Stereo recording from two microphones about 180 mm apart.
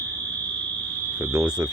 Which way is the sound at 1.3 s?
20° right (ahead or behind).